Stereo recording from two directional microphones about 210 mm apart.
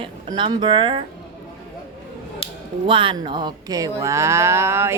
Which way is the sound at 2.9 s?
25° right (ahead or behind).